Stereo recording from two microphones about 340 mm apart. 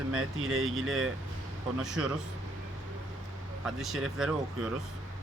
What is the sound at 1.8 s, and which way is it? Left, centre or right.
Speech, centre.